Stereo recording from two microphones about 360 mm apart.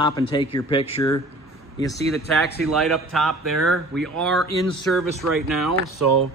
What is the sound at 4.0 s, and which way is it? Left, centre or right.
Speech, centre.